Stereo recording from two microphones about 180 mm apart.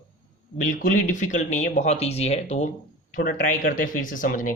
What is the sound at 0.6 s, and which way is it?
Speech, 50° left (ahead or behind).